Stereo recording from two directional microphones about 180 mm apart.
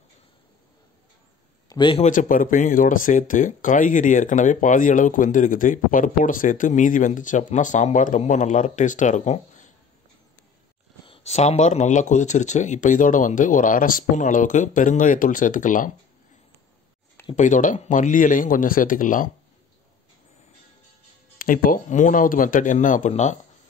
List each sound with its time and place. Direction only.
1.7 s a man's voice: 25° left (ahead or behind)
2.0 s speech: 50° left (ahead or behind)
11.1 s speech: 40° left (ahead or behind)
17.4 s speech: 45° left (ahead or behind)
21.4 s speech: 50° left (ahead or behind)